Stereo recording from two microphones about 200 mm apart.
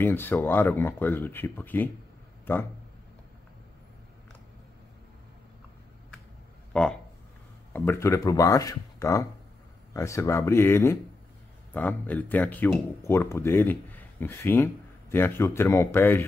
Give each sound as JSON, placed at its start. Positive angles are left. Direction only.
{"t": 0.0, "sound": "speech", "side_deg": 10}
{"t": 6.7, "sound": "speech", "side_deg": 5}